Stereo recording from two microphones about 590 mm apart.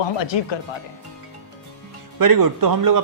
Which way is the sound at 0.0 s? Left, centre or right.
Left.